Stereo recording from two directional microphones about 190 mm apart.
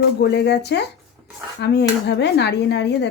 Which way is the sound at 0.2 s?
65° left (ahead or behind).